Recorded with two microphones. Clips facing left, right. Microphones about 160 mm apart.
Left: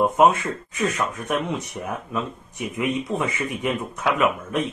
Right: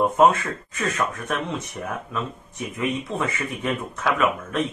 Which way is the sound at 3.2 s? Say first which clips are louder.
Left 1 dB; 15° left (ahead or behind).